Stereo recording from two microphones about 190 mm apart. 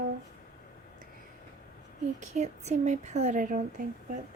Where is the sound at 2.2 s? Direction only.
40° right (ahead or behind).